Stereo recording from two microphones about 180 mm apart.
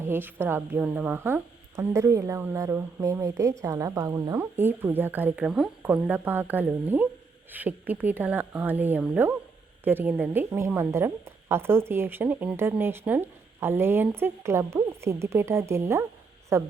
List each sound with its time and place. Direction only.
0.0 s a woman's voice: 10° right (ahead or behind)